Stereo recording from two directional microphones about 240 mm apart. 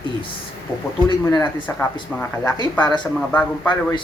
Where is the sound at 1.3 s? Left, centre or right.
Centre.